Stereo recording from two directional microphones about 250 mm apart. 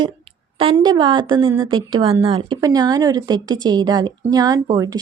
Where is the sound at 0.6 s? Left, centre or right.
Centre.